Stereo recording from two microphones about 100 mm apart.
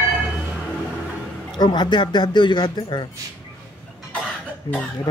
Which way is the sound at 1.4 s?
45° left (ahead or behind).